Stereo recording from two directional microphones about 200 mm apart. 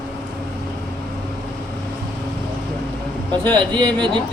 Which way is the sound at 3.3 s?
25° right (ahead or behind).